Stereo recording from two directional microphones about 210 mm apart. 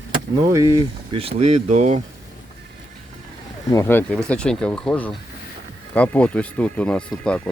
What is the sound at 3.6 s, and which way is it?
Speech, 15° left (ahead or behind).